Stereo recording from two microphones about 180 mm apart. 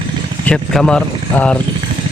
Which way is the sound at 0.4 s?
5° left (ahead or behind).